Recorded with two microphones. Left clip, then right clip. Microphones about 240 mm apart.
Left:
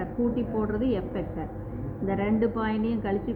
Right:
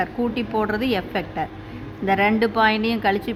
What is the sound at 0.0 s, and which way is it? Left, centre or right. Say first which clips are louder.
A woman's voice: right 5 dB; right.